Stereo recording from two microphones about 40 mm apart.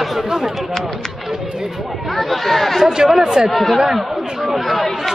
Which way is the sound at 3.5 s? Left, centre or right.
Centre.